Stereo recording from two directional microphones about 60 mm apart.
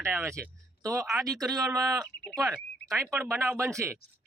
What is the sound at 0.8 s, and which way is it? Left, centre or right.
Speech, right.